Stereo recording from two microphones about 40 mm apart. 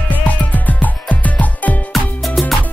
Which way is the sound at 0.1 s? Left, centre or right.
Left.